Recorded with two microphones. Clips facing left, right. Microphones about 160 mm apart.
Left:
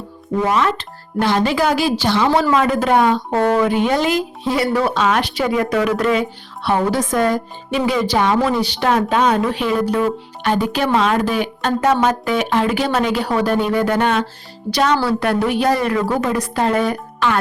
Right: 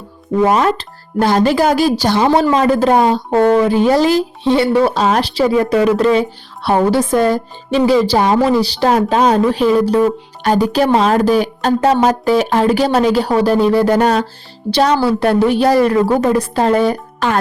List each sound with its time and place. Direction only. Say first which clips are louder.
0.4 s speech: right 5 dB; 40° right (ahead or behind)
2.3 s speech: right 3 dB; 25° right (ahead or behind)